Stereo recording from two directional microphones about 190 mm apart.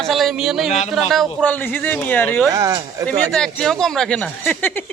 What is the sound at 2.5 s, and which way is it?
Speech, 15° right (ahead or behind).